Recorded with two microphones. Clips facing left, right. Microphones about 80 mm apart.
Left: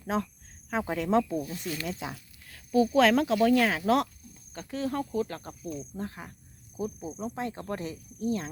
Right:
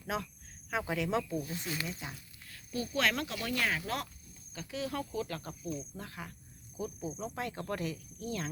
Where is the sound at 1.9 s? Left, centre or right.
Left.